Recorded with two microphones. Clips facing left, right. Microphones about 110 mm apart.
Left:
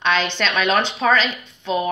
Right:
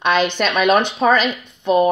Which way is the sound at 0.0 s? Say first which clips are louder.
Right 4 dB; 10° right (ahead or behind).